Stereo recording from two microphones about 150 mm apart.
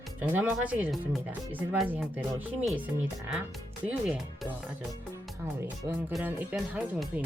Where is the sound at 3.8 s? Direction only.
5° right (ahead or behind).